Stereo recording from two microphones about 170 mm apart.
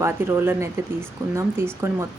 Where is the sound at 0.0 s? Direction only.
15° right (ahead or behind).